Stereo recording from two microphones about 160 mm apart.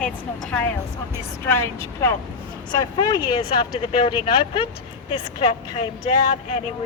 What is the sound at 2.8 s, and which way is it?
Speech, 25° left (ahead or behind).